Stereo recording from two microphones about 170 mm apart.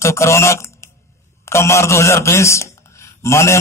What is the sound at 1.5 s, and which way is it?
A man's voice, 15° left (ahead or behind).